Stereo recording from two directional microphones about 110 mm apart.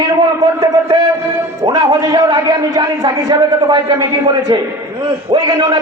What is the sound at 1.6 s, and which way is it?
A man's voice, 35° right (ahead or behind).